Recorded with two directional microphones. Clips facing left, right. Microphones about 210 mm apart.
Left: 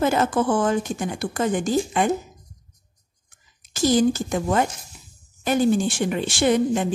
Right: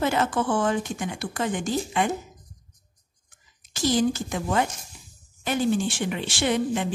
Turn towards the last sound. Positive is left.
turn(degrees=45)  # may be behind; listen again after turning